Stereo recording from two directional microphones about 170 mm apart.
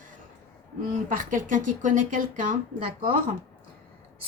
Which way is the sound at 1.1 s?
50° right (ahead or behind).